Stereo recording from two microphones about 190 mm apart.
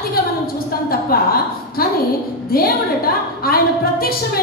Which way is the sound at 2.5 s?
50° left (ahead or behind).